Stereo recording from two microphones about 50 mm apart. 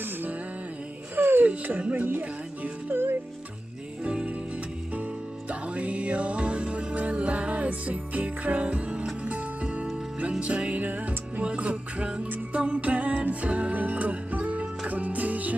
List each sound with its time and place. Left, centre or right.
0.0 s music: right
1.8 s speech: right
2.9 s music: right
4.0 s music: right
5.5 s music: right